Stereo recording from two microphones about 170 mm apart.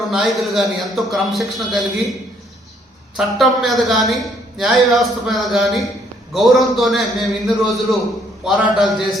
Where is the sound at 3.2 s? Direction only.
Centre (ahead or behind).